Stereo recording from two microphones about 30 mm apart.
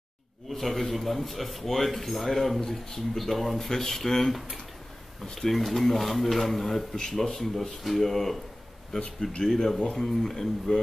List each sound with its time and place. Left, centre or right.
0.6 s speech: centre
3.2 s speech: centre
3.5 s speech: centre
8.9 s speech: centre